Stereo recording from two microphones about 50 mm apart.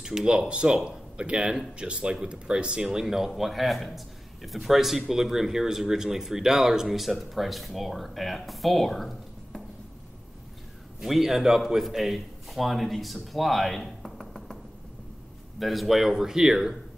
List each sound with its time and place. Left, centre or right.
0.0 s a man's voice: centre
11.0 s a man's voice: centre
15.6 s speech: centre